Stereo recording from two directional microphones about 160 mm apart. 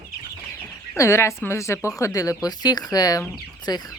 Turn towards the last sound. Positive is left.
turn(degrees=25)  # may be behind; listen again after turning